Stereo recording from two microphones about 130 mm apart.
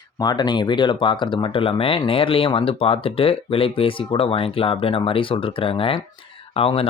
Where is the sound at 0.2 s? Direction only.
35° left (ahead or behind).